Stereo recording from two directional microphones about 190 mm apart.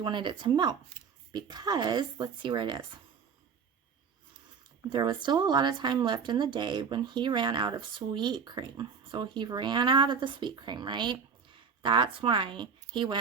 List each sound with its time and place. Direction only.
0.0 s speech: 25° right (ahead or behind)
4.9 s speech: 25° right (ahead or behind)